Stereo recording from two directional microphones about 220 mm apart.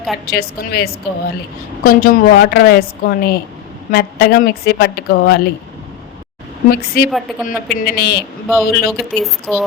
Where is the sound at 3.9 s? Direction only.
45° left (ahead or behind).